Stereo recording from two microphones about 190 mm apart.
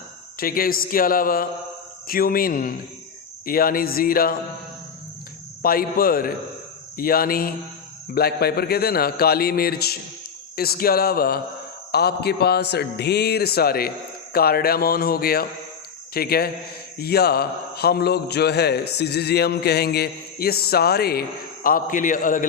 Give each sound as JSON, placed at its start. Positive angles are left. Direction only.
{"t": 0.3, "sound": "a man's voice", "side_deg": 50}
{"t": 5.6, "sound": "a man's voice", "side_deg": 50}